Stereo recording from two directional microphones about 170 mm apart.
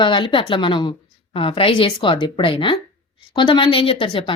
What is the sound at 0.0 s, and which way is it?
A woman's voice, 30° left (ahead or behind).